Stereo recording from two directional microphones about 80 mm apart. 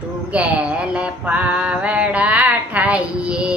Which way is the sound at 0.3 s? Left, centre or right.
Centre.